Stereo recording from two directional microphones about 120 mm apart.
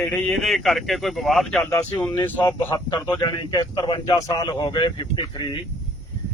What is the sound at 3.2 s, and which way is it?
Speech, 35° left (ahead or behind).